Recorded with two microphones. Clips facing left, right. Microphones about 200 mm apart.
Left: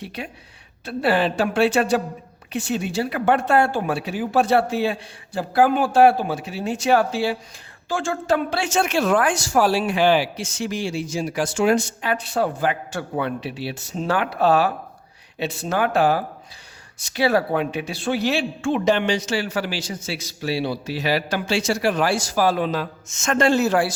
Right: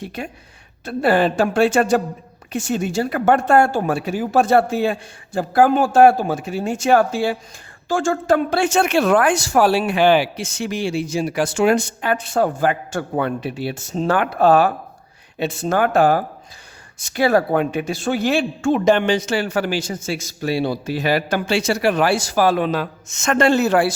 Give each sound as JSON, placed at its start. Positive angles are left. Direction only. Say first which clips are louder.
{"t": 0.2, "sound": "speech", "louder": "right 3 dB", "side_deg": -45}